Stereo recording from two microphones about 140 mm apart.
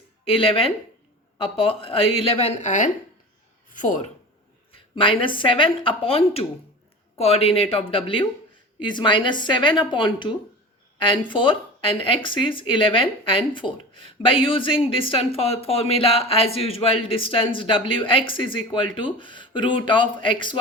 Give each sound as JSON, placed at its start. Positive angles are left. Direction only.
{"t": 0.3, "sound": "speech", "side_deg": 40}
{"t": 4.7, "sound": "speech", "side_deg": 40}